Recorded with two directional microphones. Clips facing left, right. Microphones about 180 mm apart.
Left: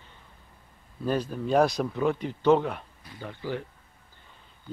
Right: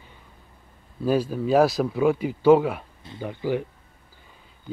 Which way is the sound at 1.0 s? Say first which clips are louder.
Right 5 dB; 5° right (ahead or behind).